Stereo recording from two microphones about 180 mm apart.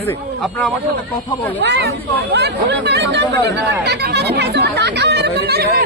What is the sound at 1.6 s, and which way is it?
Speech, 65° right (ahead or behind).